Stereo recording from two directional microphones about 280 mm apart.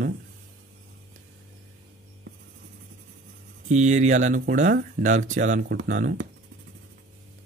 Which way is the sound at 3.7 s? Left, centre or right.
Right.